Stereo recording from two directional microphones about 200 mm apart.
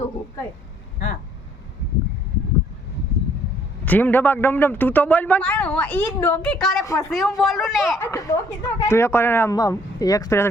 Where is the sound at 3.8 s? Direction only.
10° left (ahead or behind).